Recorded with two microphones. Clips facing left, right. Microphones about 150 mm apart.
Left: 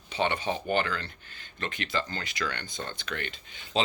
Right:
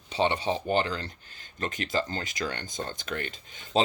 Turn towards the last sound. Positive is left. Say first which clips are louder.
# right 4 dB
turn(degrees=-40)  # may be behind; listen again after turning